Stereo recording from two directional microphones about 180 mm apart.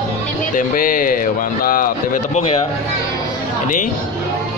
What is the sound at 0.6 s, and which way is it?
Speech, 50° left (ahead or behind).